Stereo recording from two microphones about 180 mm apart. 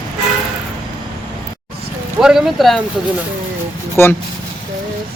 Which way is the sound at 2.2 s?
Centre (ahead or behind).